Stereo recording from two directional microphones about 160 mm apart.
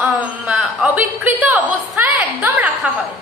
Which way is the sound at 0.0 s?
5° right (ahead or behind).